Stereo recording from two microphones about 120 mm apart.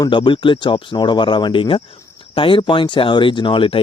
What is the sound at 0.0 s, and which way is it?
Speech, 40° left (ahead or behind).